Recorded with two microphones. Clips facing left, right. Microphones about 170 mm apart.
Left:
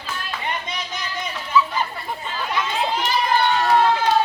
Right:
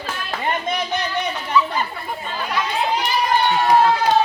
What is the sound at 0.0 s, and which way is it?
Clapping, 45° right (ahead or behind).